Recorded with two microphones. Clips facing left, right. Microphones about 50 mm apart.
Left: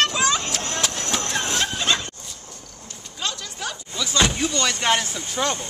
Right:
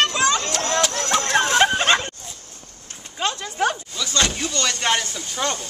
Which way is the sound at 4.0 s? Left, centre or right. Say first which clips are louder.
Left 2 dB; centre.